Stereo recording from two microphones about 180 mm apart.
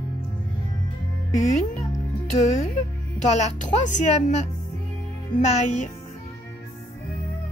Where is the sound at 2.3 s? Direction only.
40° left (ahead or behind).